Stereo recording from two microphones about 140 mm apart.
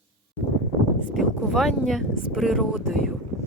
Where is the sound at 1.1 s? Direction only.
Centre (ahead or behind).